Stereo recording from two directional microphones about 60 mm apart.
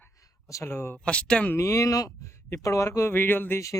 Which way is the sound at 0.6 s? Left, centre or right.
Left.